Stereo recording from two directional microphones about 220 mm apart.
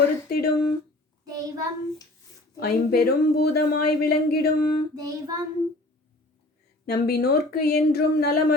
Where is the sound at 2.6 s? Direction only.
45° left (ahead or behind).